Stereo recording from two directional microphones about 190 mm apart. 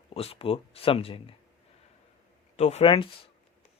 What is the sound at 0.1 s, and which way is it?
Speech, 30° left (ahead or behind).